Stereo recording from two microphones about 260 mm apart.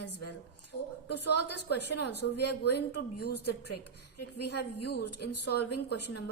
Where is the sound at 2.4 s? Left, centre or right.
Left.